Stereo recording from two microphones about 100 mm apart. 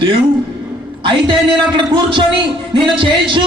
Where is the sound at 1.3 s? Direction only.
55° right (ahead or behind).